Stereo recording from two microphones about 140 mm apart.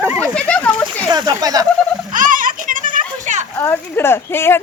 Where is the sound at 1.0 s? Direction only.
25° right (ahead or behind).